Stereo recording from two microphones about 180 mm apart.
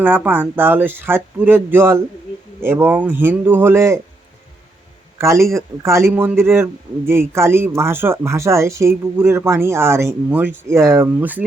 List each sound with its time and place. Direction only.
0.0 s speech: 10° right (ahead or behind)
5.1 s a man's voice: 15° right (ahead or behind)